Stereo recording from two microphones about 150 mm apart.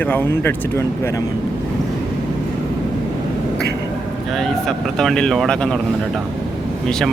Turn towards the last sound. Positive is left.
turn(degrees=5)  # may be behind; listen again after turning